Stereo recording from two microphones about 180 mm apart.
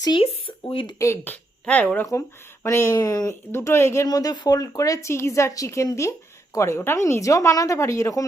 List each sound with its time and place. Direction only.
0.0 s speech: 30° left (ahead or behind)
0.9 s speech: 15° left (ahead or behind)